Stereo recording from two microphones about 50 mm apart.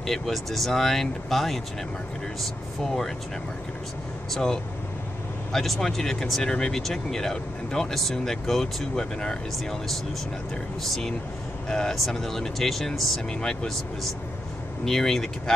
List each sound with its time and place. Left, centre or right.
0.0 s speech: centre
4.3 s speech: centre
10.8 s speech: centre
14.9 s speech: centre